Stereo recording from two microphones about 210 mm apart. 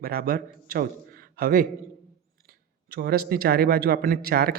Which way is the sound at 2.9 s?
50° right (ahead or behind).